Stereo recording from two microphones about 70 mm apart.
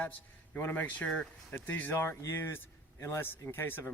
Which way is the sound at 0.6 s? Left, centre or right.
Left.